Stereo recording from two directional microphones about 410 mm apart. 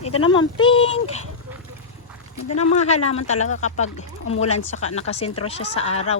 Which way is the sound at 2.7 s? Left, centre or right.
Centre.